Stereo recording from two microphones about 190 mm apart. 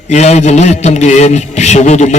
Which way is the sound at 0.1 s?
35° left (ahead or behind).